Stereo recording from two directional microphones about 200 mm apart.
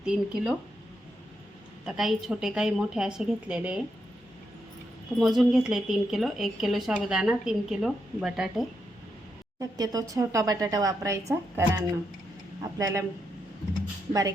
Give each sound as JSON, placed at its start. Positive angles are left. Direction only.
{"t": 0.0, "sound": "a woman's voice", "side_deg": -5}
{"t": 1.8, "sound": "a woman's voice", "side_deg": 0}
{"t": 5.2, "sound": "a woman's voice", "side_deg": 0}
{"t": 9.6, "sound": "speech", "side_deg": -20}
{"t": 12.8, "sound": "speech", "side_deg": -15}
{"t": 14.1, "sound": "speech", "side_deg": -15}